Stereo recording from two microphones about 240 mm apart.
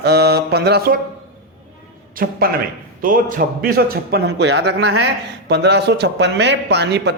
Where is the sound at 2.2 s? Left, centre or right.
Right.